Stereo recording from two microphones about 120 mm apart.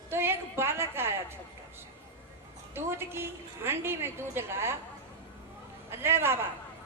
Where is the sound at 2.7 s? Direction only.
20° right (ahead or behind).